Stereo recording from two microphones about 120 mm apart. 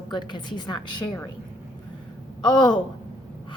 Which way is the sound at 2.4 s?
40° left (ahead or behind).